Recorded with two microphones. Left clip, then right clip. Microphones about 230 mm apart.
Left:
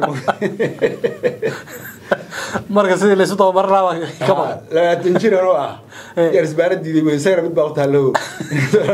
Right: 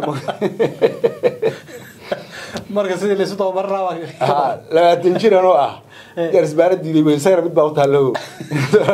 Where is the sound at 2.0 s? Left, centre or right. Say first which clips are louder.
Left 6 dB; left.